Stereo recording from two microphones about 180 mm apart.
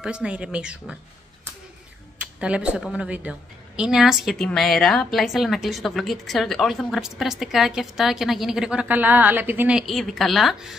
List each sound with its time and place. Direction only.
0.0 s a woman's voice: 5° right (ahead or behind)
2.4 s a woman's voice: 5° right (ahead or behind)